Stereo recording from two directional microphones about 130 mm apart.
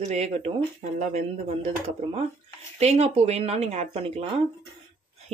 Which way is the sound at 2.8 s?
55° right (ahead or behind).